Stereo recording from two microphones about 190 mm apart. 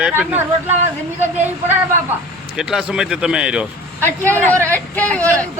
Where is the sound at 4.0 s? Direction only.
10° left (ahead or behind).